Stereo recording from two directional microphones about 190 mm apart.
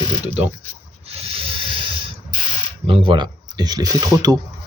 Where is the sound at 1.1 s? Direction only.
30° right (ahead or behind).